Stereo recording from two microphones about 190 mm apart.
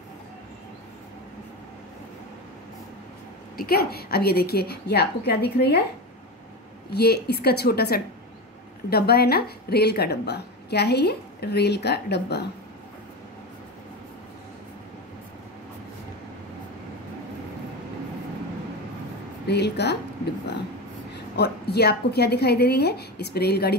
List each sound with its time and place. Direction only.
3.5 s a woman's voice: 55° left (ahead or behind)
6.9 s a woman's voice: 60° left (ahead or behind)
19.4 s a woman's voice: 60° left (ahead or behind)
21.1 s a woman's voice: 60° left (ahead or behind)